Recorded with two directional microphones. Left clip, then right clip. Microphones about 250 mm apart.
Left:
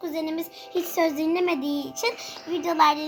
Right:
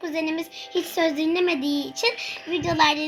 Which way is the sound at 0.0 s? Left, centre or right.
Centre.